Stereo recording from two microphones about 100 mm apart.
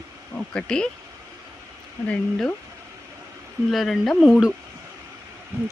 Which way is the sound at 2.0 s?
15° left (ahead or behind).